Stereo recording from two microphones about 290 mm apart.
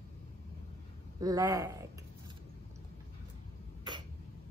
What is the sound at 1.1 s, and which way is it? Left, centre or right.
Speech, centre.